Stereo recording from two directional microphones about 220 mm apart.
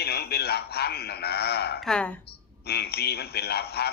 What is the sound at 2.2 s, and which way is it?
A man's voice, 45° left (ahead or behind).